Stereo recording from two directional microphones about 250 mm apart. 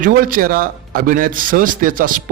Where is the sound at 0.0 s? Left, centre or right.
Right.